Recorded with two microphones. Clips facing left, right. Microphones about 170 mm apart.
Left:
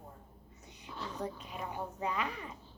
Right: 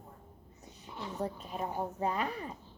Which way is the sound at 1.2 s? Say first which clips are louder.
Right 6 dB; 40° right (ahead or behind).